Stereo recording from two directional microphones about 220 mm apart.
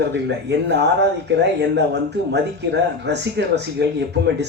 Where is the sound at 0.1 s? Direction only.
50° right (ahead or behind).